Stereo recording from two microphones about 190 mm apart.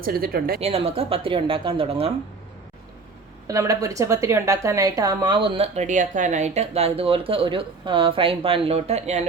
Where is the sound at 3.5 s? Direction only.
20° right (ahead or behind).